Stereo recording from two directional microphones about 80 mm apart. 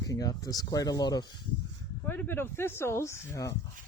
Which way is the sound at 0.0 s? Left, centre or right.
Left.